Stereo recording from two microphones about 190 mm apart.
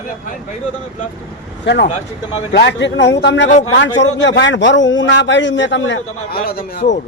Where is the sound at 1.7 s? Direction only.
70° left (ahead or behind).